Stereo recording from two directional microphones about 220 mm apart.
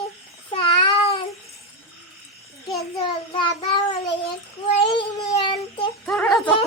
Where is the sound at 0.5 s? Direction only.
20° left (ahead or behind).